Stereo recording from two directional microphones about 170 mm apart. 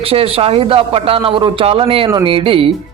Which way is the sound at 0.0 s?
35° right (ahead or behind).